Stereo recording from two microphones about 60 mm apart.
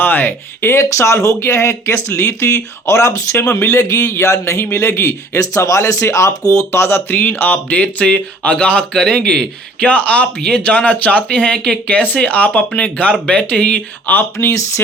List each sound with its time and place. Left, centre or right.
0.0 s speech: left
0.7 s a man's voice: left
6.4 s speech: left
6.7 s speech: left
14.3 s speech: left